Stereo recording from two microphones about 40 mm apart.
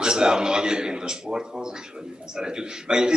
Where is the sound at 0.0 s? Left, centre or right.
Centre.